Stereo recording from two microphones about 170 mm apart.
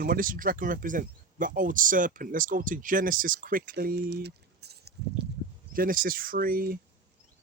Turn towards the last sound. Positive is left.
turn(degrees=-60)  # may be behind; listen again after turning